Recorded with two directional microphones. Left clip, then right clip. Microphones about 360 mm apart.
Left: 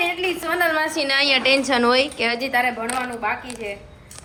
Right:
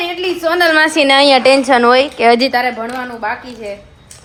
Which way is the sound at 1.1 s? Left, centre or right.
Centre.